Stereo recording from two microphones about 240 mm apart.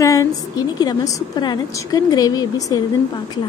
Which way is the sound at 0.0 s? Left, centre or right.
Centre.